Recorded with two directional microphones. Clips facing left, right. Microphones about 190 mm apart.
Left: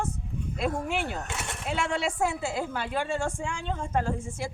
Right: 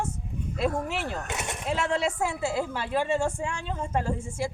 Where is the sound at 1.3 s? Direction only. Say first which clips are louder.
Right 3 dB; 20° right (ahead or behind).